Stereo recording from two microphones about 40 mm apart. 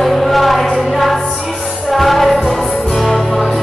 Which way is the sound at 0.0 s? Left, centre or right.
Centre.